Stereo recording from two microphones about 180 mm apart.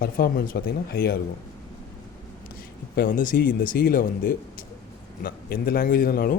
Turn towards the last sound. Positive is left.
turn(degrees=55)  # may be behind; listen again after turning